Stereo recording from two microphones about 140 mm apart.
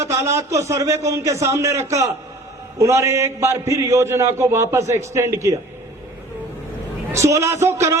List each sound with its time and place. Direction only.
0.0 s a man's voice: 20° right (ahead or behind)
7.1 s a man's voice: 20° right (ahead or behind)